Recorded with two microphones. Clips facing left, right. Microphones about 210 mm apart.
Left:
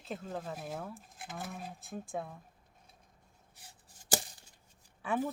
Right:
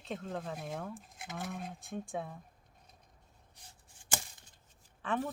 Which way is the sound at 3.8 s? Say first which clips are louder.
Left 6 dB; 40° left (ahead or behind).